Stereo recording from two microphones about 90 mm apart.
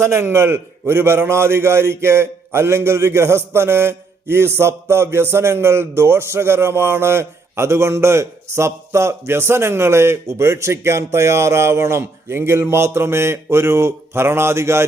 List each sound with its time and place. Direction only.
0.0 s a man's voice: 30° right (ahead or behind)